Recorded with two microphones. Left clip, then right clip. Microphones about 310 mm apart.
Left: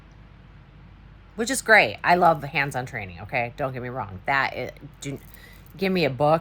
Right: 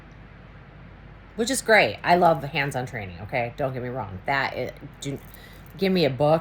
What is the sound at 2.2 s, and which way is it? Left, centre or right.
Speech, centre.